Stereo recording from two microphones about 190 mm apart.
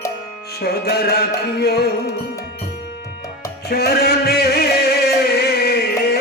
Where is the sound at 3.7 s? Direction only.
55° left (ahead or behind).